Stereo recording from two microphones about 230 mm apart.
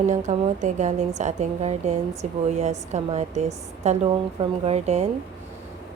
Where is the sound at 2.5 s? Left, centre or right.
Right.